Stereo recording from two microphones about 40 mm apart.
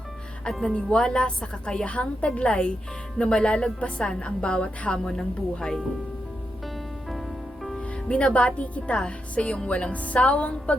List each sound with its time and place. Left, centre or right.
0.7 s a woman's voice: left
7.8 s a woman's voice: left